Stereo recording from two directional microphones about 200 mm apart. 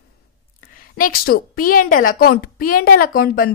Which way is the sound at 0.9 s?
45° left (ahead or behind).